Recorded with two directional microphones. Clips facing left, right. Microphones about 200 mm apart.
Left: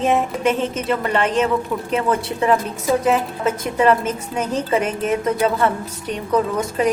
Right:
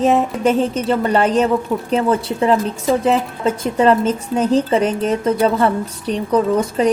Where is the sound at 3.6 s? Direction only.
30° right (ahead or behind).